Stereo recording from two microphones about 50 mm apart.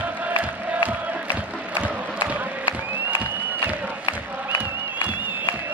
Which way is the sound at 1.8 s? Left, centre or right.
Right.